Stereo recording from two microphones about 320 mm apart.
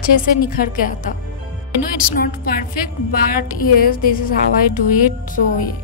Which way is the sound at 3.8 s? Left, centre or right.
Left.